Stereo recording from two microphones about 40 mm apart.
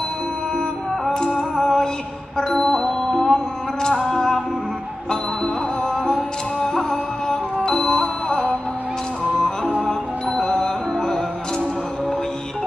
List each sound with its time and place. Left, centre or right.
1.1 s music: centre
9.8 s music: centre